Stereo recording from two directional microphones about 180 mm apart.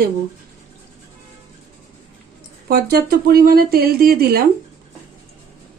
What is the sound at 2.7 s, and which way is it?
Speech, 55° right (ahead or behind).